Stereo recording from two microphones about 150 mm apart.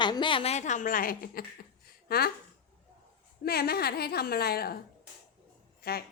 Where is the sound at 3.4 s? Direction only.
90° left.